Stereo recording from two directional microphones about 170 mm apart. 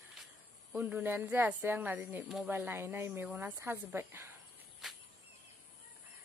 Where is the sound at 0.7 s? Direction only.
10° right (ahead or behind).